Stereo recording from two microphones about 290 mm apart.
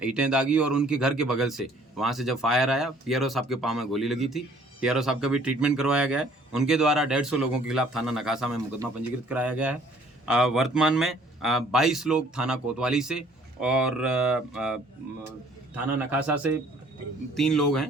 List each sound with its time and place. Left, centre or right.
0.0 s a man's voice: centre